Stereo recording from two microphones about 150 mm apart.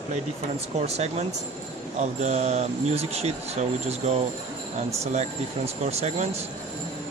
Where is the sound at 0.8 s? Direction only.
45° right (ahead or behind).